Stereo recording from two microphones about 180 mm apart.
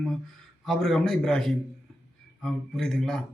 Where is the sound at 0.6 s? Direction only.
Centre (ahead or behind).